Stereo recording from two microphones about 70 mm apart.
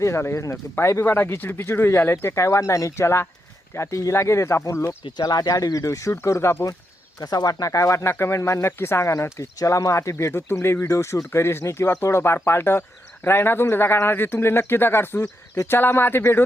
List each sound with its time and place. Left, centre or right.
0.0 s speech: left
1.0 s speech: left
5.1 s speech: left
7.2 s speech: left
15.2 s speech: left
15.7 s speech: left